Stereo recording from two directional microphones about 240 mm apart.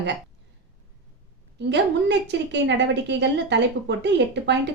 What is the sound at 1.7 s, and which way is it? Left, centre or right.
A woman's voice, right.